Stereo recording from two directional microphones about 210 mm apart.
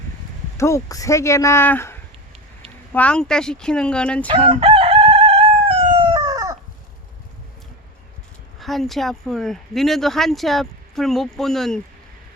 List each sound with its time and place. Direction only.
0.5 s speech: 15° left (ahead or behind)
4.4 s chicken: 25° right (ahead or behind)
8.5 s speech: centre (ahead or behind)